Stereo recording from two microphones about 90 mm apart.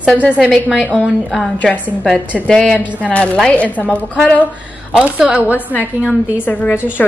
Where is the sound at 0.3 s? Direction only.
5° right (ahead or behind).